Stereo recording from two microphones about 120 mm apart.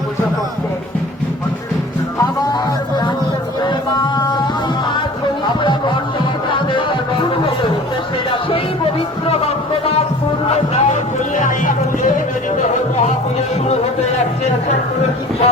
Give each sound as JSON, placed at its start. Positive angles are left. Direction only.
{"t": 2.5, "sound": "music", "side_deg": 35}
{"t": 5.5, "sound": "music", "side_deg": 40}
{"t": 10.5, "sound": "music", "side_deg": 75}